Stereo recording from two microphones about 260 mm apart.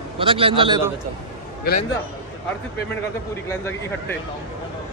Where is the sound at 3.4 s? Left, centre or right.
Centre.